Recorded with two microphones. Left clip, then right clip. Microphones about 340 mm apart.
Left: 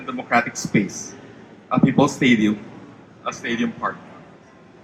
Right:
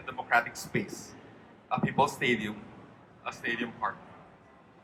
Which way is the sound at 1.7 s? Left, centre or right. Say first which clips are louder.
Left 9 dB; right.